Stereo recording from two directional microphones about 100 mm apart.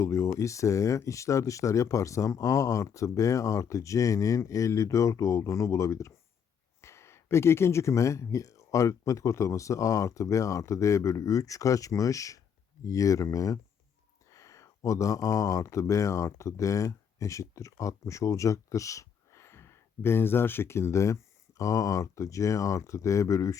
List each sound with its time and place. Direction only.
0.0 s speech: 30° left (ahead or behind)